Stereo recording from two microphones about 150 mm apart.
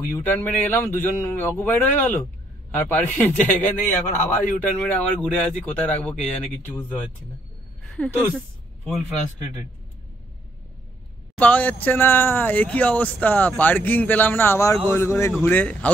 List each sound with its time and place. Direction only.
0.1 s speech: 15° left (ahead or behind)
7.8 s a sound: 5° left (ahead or behind)
11.3 s speech: 10° left (ahead or behind)